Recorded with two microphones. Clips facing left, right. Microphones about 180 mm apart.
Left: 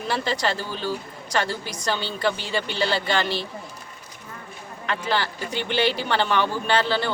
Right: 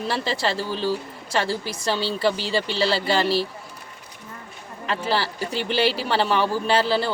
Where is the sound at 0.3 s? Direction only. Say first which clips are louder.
Right 1 dB; 30° right (ahead or behind).